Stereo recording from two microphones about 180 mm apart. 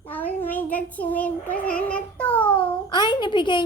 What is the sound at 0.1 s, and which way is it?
Child singing, 10° left (ahead or behind).